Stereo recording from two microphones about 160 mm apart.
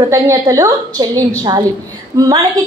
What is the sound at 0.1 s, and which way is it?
A woman's voice, 20° right (ahead or behind).